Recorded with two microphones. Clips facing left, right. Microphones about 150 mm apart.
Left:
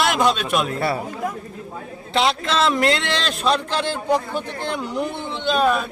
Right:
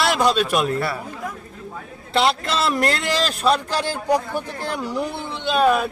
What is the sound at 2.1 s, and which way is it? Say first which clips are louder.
A man's voice: even; centre (ahead or behind).